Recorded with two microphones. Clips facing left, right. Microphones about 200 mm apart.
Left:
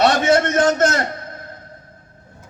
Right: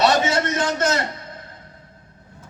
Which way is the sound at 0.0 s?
55° left (ahead or behind).